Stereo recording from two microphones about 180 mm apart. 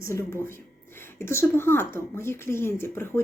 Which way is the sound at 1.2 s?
15° left (ahead or behind).